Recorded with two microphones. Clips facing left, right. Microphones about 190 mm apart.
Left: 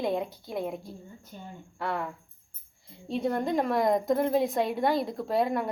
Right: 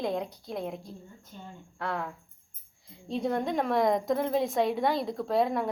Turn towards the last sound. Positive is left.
turn(degrees=0)  # may be behind; listen again after turning